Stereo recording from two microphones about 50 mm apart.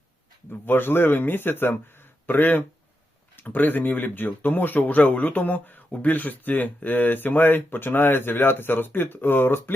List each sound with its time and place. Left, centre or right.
0.6 s speech: left